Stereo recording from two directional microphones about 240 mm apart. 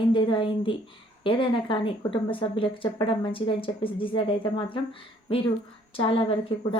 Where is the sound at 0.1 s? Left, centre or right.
Centre.